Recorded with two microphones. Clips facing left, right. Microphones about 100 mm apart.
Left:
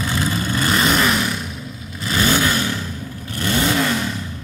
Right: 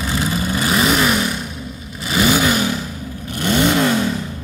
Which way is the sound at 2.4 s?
15° right (ahead or behind).